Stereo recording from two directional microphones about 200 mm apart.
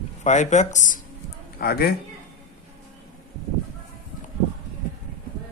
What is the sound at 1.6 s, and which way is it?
Speech, 50° left (ahead or behind).